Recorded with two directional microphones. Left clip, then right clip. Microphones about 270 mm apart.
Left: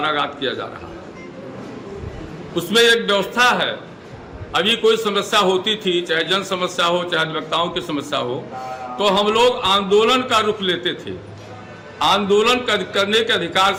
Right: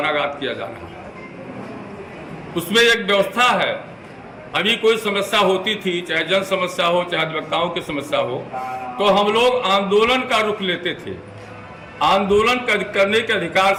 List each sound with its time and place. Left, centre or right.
0.0 s a man's voice: centre
2.6 s a man's voice: centre